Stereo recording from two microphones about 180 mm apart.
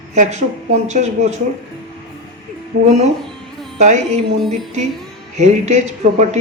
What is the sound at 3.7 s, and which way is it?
Music, 40° right (ahead or behind).